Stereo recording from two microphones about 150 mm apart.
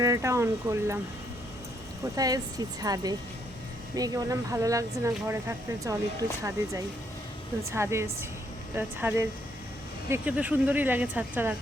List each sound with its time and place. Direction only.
0.0 s speech: 20° right (ahead or behind)
2.1 s speech: 25° right (ahead or behind)
7.7 s speech: 15° right (ahead or behind)